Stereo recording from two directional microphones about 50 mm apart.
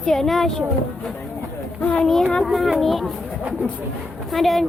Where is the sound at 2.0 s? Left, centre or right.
Centre.